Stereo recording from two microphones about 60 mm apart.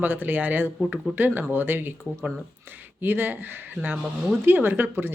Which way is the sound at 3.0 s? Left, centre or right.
Right.